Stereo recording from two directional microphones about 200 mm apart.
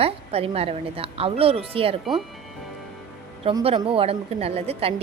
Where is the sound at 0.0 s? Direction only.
30° right (ahead or behind).